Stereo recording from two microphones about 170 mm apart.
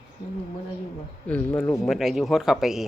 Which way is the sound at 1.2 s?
10° left (ahead or behind).